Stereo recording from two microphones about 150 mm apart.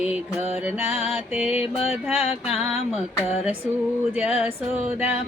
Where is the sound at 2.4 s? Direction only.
Centre (ahead or behind).